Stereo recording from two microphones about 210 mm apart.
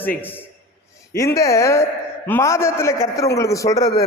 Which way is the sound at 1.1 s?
15° left (ahead or behind).